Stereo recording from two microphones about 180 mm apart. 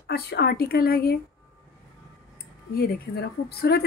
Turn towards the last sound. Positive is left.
turn(degrees=60)  # may be behind; listen again after turning